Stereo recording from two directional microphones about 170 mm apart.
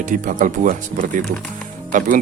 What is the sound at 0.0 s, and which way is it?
Speech, 50° right (ahead or behind).